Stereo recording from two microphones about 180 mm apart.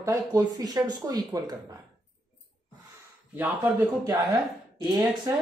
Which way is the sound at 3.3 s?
15° right (ahead or behind).